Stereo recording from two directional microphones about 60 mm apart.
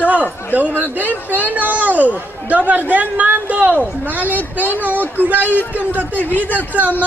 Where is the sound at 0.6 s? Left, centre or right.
Right.